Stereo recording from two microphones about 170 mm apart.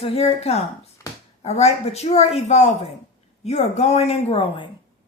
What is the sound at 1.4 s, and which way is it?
A woman's voice, 40° left (ahead or behind).